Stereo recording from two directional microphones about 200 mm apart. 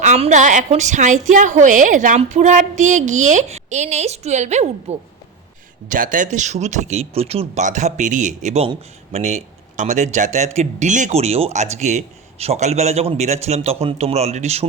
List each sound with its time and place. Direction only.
0.0 s speech: 35° right (ahead or behind)